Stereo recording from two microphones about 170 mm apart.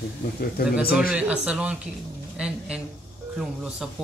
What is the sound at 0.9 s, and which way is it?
Speech, 10° right (ahead or behind).